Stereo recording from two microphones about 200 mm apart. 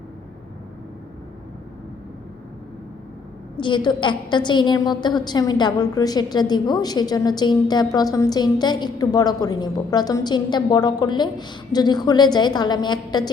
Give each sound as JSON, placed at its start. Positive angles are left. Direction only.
{"t": 3.6, "sound": "a woman's voice", "side_deg": 25}